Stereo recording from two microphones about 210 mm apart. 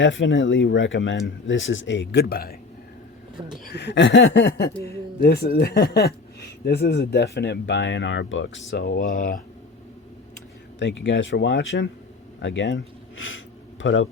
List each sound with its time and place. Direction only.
0.0 s speech: 60° left (ahead or behind); by 2.6 s 45° left (ahead or behind)
3.6 s speech: 50° left (ahead or behind)
4.4 s speech: 50° left (ahead or behind)
10.8 s speech: 55° left (ahead or behind)